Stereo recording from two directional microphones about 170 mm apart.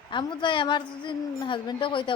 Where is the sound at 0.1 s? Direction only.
30° left (ahead or behind).